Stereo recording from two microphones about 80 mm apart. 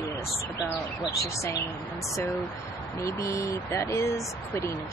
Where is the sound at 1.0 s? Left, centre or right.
Left.